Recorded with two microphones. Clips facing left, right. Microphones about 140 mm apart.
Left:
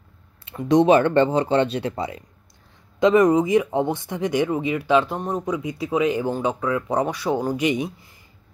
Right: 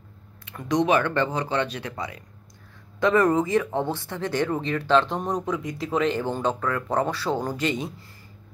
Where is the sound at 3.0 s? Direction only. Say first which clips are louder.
Left 4 dB; 15° left (ahead or behind).